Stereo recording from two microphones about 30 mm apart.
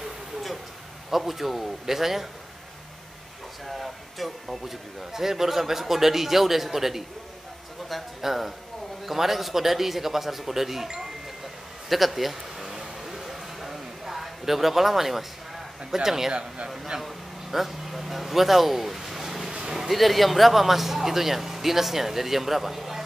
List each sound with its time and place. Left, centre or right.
1.1 s speech: centre
3.6 s a sound: centre
4.5 s speech: centre
8.2 s a man's voice: centre
12.6 s a sound: centre
15.9 s speech: centre
16.3 s speech: right
17.0 s speech: centre
19.2 s a sound: centre
19.9 s speech: centre